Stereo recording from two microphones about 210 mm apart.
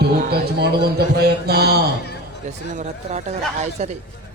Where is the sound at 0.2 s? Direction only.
50° right (ahead or behind).